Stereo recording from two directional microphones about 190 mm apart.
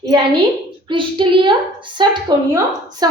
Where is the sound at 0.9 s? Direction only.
25° right (ahead or behind).